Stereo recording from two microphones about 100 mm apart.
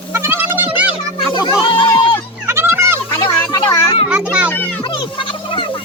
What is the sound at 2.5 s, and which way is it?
Children playing, 25° right (ahead or behind).